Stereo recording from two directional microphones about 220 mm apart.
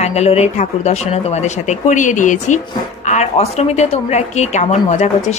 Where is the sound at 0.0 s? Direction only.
30° left (ahead or behind).